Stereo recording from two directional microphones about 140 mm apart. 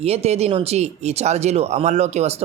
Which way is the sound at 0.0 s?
45° right (ahead or behind).